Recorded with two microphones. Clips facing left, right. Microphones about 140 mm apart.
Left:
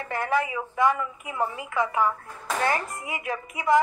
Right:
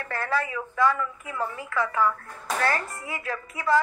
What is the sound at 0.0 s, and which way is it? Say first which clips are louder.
A woman's voice: left 2 dB; 20° left (ahead or behind).